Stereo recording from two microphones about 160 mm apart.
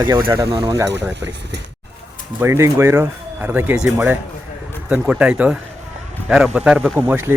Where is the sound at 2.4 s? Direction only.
15° right (ahead or behind).